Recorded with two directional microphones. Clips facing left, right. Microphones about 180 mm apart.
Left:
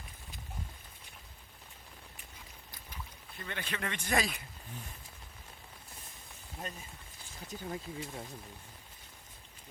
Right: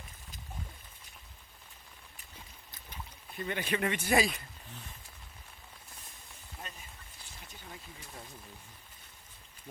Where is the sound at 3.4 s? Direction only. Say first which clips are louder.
Right 7 dB; 15° right (ahead or behind).